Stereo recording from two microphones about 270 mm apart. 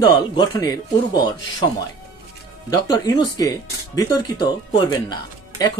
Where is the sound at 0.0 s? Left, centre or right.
Centre.